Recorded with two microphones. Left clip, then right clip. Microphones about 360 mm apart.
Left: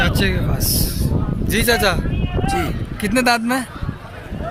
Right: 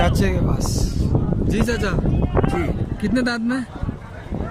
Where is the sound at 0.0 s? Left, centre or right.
Centre.